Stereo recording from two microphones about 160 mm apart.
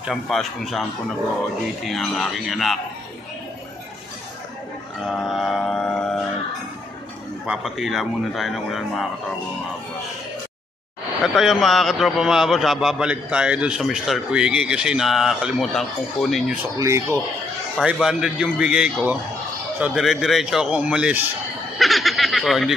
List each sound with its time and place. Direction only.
0.0 s a man's voice: centre (ahead or behind)
1.9 s a man's voice: centre (ahead or behind)
5.0 s music: centre (ahead or behind)
7.4 s a man's voice: 5° right (ahead or behind)
11.3 s a man's voice: centre (ahead or behind)
16.7 s speech: 20° right (ahead or behind)
17.9 s a man's voice: 5° right (ahead or behind)
21.7 s snicker: centre (ahead or behind)